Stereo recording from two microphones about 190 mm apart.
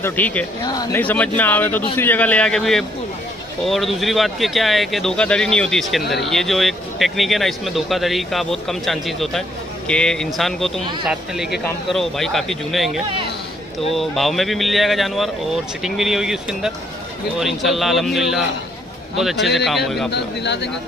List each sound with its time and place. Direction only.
0.0 s speech: 10° left (ahead or behind)
0.7 s speech: 20° left (ahead or behind)
1.0 s speech: 10° left (ahead or behind)
19.4 s speech: centre (ahead or behind)
20.1 s speech: 65° left (ahead or behind)